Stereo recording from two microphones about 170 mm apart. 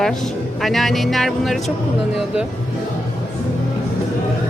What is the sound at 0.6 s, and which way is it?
Speech, centre (ahead or behind).